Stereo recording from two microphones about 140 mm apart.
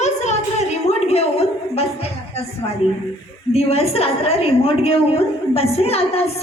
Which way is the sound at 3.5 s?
45° left (ahead or behind).